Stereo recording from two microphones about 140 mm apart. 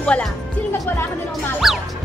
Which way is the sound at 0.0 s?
10° left (ahead or behind).